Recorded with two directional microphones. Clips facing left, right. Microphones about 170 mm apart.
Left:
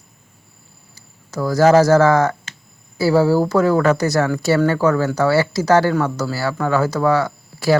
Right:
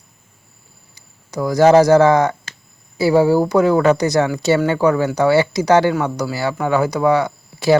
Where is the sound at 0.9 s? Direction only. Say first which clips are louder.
Right 2 dB; 15° right (ahead or behind).